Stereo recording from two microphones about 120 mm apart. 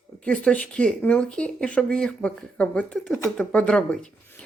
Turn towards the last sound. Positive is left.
turn(degrees=5)  # may be behind; listen again after turning